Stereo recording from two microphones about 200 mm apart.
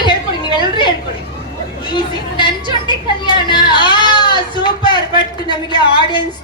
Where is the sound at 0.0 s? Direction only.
25° left (ahead or behind).